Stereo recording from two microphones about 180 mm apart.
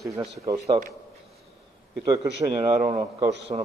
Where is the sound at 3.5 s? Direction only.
30° right (ahead or behind).